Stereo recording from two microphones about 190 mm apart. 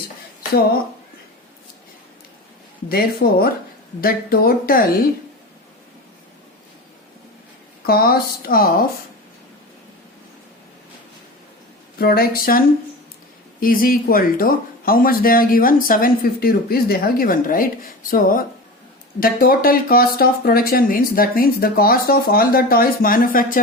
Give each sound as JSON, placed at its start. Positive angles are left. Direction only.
{"t": 2.9, "sound": "speech", "side_deg": 55}
{"t": 7.9, "sound": "speech", "side_deg": 50}
{"t": 11.9, "sound": "speech", "side_deg": 50}